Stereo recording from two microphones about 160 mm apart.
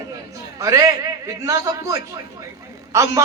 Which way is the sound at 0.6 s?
20° right (ahead or behind).